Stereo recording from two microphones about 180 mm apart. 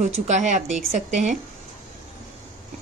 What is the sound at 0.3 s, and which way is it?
A woman's voice, 40° right (ahead or behind).